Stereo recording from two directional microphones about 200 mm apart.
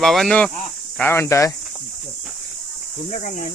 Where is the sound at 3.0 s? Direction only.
35° left (ahead or behind).